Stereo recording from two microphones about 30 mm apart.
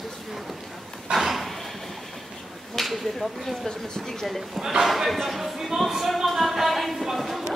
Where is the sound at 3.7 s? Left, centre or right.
Centre.